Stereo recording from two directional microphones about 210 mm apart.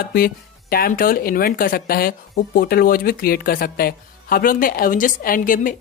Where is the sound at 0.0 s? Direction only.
45° left (ahead or behind).